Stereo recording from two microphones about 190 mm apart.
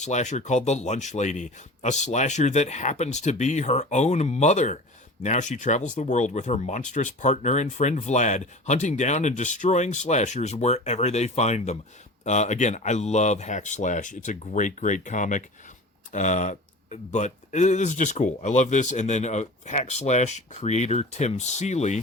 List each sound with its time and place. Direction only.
0.0 s speech: 40° left (ahead or behind)